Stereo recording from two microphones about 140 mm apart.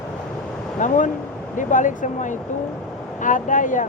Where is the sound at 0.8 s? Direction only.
65° left (ahead or behind).